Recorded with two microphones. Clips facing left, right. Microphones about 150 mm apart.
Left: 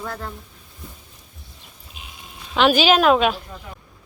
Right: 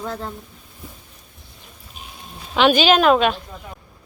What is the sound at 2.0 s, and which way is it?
Sheep, 40° right (ahead or behind).